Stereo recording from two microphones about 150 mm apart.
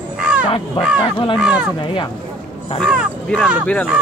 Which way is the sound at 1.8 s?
35° left (ahead or behind).